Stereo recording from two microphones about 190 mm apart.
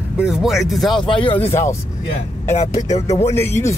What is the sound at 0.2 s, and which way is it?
Speech, 5° right (ahead or behind).